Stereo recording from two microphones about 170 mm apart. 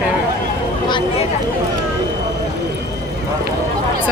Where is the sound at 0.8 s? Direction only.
25° left (ahead or behind).